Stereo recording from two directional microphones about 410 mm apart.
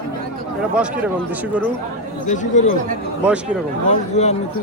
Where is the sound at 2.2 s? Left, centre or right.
Centre.